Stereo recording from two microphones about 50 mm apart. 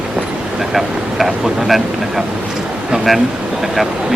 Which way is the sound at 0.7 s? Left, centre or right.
Centre.